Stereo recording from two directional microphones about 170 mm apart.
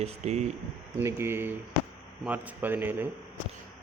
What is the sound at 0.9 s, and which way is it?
A man's voice, 15° right (ahead or behind).